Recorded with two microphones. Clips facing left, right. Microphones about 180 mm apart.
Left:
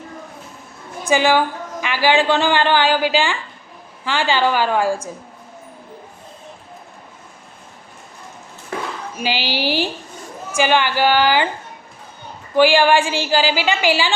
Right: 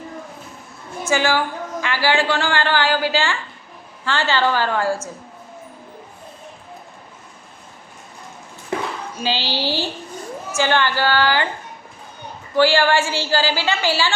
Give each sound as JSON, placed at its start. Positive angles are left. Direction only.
{"t": 1.0, "sound": "a woman's voice", "side_deg": 15}
{"t": 9.1, "sound": "a sound", "side_deg": 15}
{"t": 10.5, "sound": "a woman's voice", "side_deg": 15}
{"t": 12.5, "sound": "a woman's voice", "side_deg": 15}